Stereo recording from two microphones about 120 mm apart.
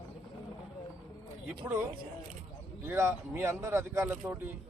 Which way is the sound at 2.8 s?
20° right (ahead or behind).